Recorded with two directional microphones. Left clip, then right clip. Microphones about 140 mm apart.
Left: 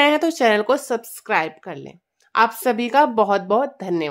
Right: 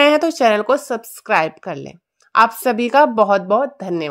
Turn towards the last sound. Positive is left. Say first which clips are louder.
# right 2 dB
turn(degrees=-15)  # may be behind; listen again after turning